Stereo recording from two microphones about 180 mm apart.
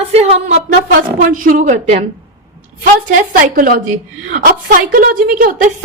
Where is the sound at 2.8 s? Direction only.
55° right (ahead or behind).